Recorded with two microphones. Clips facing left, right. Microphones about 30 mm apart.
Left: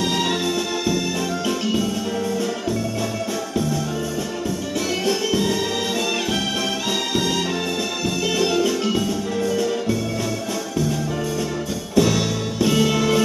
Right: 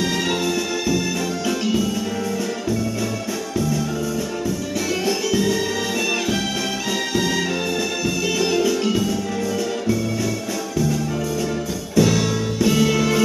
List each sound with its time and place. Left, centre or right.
5.0 s music: centre
8.4 s music: centre
12.0 s music: centre